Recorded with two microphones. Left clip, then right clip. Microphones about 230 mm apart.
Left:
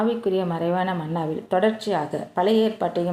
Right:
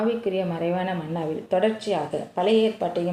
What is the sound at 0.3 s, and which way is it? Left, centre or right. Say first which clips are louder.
Speech: left 2 dB; left.